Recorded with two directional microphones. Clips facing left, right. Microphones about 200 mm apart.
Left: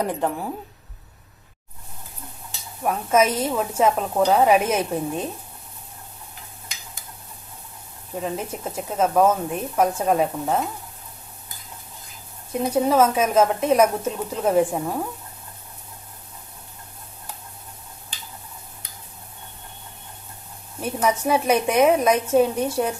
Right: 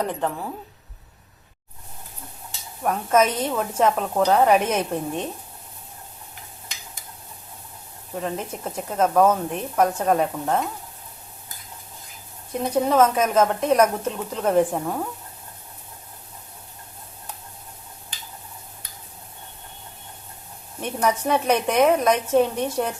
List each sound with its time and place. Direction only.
0.0 s speech: 10° left (ahead or behind)
2.8 s speech: 5° left (ahead or behind)
8.1 s speech: 5° left (ahead or behind)
12.5 s speech: 5° left (ahead or behind)
20.8 s speech: 5° left (ahead or behind)